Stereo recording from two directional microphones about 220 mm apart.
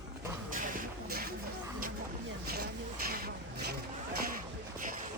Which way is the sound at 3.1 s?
45° right (ahead or behind).